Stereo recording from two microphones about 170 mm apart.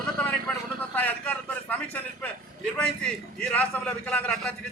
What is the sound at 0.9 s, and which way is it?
Speech, 10° left (ahead or behind).